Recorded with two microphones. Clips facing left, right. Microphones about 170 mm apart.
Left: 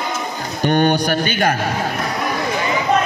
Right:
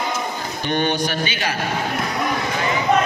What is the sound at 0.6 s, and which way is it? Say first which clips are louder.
Speech: left 6 dB; 45° left (ahead or behind).